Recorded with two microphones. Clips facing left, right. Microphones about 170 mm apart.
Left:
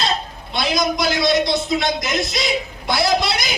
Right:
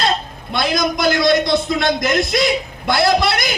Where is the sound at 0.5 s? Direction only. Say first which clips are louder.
Right 2 dB; 50° right (ahead or behind).